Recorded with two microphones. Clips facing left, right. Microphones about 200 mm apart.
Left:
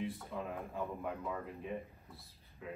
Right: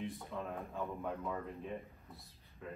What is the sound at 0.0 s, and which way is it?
Speech, 5° left (ahead or behind).